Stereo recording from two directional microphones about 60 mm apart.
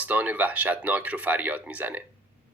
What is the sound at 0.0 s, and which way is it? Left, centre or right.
Speech, right.